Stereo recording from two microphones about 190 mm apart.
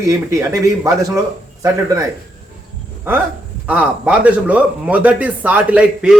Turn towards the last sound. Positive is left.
turn(degrees=-5)  # may be behind; listen again after turning